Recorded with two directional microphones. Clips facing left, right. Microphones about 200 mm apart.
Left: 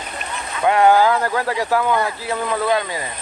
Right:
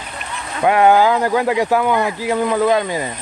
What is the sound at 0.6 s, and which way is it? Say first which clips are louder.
Speech: right 2 dB; 20° right (ahead or behind).